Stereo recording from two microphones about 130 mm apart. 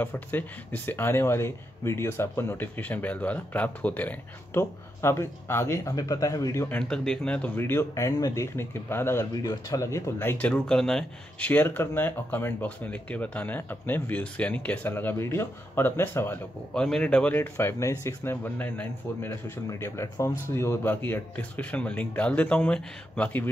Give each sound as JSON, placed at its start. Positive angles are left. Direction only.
{"t": 0.0, "sound": "speech", "side_deg": 15}
{"t": 6.8, "sound": "speech", "side_deg": 5}
{"t": 16.7, "sound": "speech", "side_deg": 5}